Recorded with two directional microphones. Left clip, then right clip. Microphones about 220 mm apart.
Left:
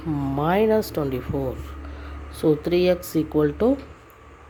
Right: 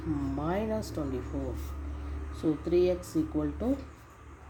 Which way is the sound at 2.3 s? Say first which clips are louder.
Left 7 dB; 35° left (ahead or behind).